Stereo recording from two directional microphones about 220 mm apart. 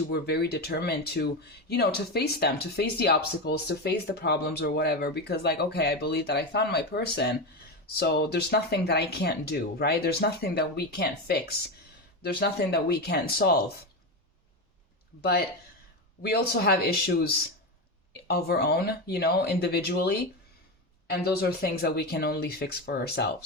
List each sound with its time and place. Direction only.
0.1 s speech: 45° left (ahead or behind)
15.2 s speech: 45° left (ahead or behind)